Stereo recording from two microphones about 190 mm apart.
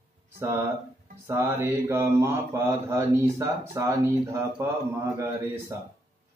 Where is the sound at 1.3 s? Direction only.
10° right (ahead or behind).